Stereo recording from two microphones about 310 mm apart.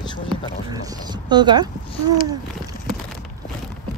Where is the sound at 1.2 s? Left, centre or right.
Centre.